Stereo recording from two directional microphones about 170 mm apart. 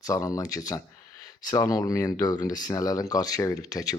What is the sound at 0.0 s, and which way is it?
Speech, 20° left (ahead or behind).